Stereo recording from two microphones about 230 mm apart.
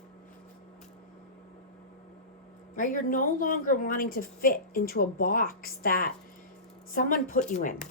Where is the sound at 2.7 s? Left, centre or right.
Left.